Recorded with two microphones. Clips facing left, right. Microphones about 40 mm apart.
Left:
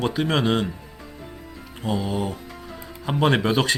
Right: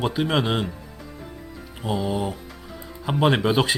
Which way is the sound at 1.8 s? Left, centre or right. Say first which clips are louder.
Even; centre.